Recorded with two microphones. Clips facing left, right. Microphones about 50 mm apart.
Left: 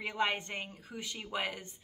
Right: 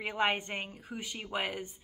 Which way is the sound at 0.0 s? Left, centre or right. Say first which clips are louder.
Right 2 dB; right.